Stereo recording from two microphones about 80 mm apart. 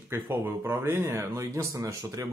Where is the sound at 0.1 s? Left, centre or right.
Right.